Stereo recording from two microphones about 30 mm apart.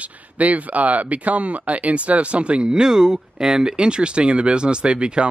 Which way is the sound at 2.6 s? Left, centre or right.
Right.